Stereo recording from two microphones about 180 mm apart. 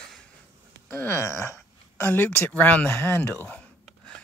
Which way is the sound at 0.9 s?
15° left (ahead or behind).